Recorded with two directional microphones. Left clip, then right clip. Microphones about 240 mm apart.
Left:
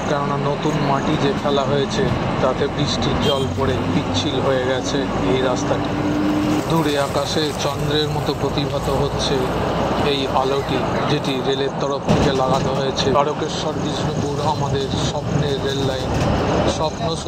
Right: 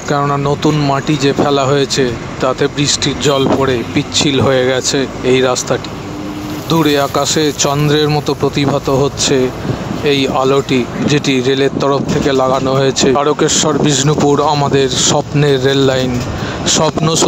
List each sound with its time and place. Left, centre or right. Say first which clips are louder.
1.2 s speech: right 7 dB; right
6.7 s speech: right 11 dB; right
11.1 s speech: right 7 dB; right